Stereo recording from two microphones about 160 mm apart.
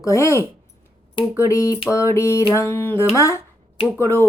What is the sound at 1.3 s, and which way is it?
A woman's voice, 20° left (ahead or behind).